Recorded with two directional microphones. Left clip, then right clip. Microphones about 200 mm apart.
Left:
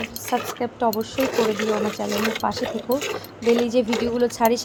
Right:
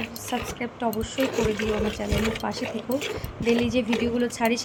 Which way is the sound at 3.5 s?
20° left (ahead or behind).